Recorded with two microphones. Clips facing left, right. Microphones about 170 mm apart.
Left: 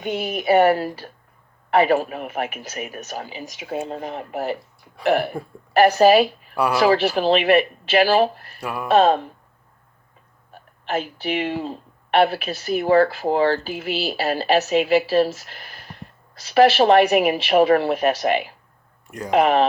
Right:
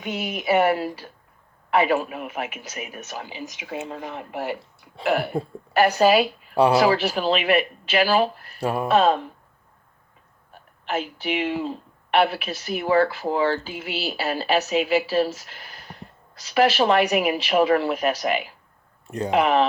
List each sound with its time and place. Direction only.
0.0 s speech: 45° left (ahead or behind)
6.5 s speech: 30° right (ahead or behind)
6.8 s speech: 40° left (ahead or behind)
8.5 s speech: 30° right (ahead or behind)
8.9 s speech: 40° left (ahead or behind)
10.8 s speech: 35° left (ahead or behind)
19.0 s speech: 30° right (ahead or behind)
19.3 s speech: 45° left (ahead or behind)